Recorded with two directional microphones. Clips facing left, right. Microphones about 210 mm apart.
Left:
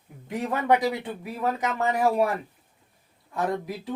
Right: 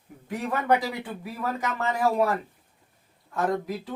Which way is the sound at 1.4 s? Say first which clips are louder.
Left 3 dB; 20° left (ahead or behind).